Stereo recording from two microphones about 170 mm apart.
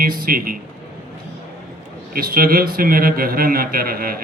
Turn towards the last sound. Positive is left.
turn(degrees=-60)  # may be behind; listen again after turning